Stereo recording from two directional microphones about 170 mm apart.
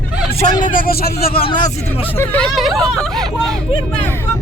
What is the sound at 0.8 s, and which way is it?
Speech, 60° left (ahead or behind).